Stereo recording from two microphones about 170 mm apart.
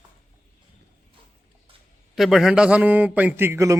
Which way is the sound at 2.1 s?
Centre (ahead or behind).